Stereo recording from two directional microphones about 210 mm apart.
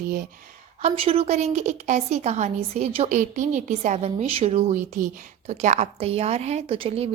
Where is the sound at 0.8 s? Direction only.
30° right (ahead or behind).